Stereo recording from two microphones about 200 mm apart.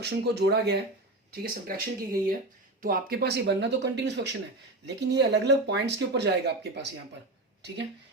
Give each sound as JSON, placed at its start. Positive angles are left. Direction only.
{"t": 0.0, "sound": "speech", "side_deg": -55}